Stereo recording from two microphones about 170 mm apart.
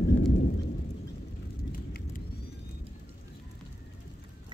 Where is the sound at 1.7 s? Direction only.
55° left (ahead or behind).